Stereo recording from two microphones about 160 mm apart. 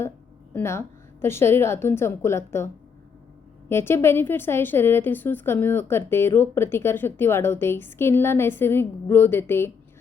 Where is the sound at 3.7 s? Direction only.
15° left (ahead or behind).